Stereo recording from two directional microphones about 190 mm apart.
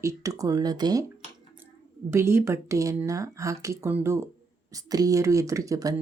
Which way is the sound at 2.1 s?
15° right (ahead or behind).